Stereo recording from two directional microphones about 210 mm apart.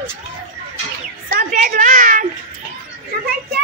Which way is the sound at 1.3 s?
40° right (ahead or behind).